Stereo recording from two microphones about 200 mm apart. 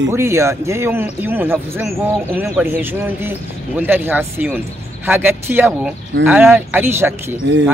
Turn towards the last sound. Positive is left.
turn(degrees=-10)  # may be behind; listen again after turning